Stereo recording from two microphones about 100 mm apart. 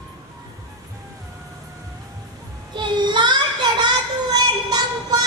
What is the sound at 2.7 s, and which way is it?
Child singing, 50° right (ahead or behind).